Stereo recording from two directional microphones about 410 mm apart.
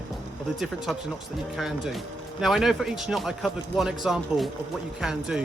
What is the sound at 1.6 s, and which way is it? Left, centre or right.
Speech, centre.